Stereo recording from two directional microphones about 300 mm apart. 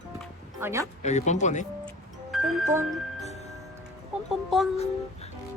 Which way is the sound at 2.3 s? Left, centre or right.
Centre.